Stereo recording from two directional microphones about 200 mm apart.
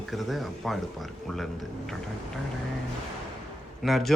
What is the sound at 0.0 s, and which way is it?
Speech, centre (ahead or behind).